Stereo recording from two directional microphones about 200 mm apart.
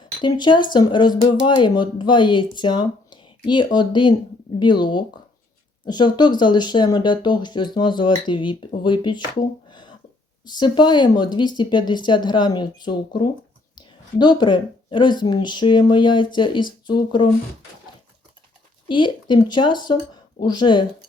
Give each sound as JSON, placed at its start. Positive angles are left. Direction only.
{"t": 0.2, "sound": "speech", "side_deg": 20}
{"t": 9.6, "sound": "a sound", "side_deg": 25}
{"t": 10.4, "sound": "speech", "side_deg": 20}
{"t": 18.9, "sound": "speech", "side_deg": 25}